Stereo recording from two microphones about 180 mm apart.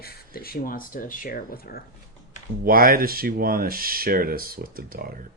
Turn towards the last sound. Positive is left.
turn(degrees=-55)  # may be behind; listen again after turning